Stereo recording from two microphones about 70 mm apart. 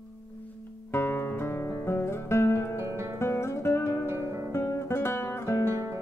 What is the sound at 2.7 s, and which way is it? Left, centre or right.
Guitar, right.